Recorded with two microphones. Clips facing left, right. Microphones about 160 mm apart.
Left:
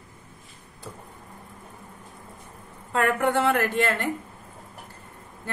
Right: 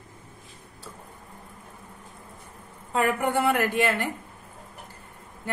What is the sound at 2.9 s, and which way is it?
Speech, 5° right (ahead or behind).